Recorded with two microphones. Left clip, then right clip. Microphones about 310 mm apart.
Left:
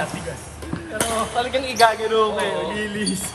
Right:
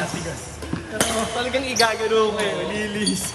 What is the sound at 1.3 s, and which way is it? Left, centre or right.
Speech, centre.